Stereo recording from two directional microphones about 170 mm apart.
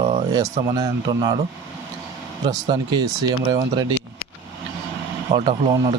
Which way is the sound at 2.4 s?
25° right (ahead or behind).